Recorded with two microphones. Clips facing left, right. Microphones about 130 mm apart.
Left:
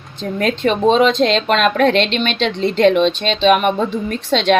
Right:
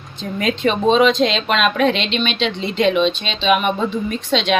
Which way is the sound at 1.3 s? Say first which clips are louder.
Left 3 dB; 45° left (ahead or behind).